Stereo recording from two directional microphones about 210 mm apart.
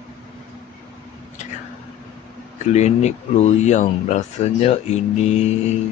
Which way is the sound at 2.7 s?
30° left (ahead or behind).